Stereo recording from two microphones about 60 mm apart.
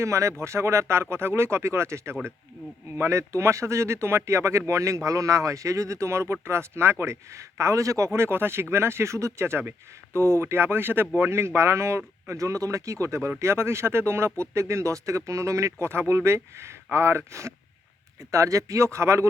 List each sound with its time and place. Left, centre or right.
0.0 s speech: right
8.2 s speech: right
18.2 s speech: right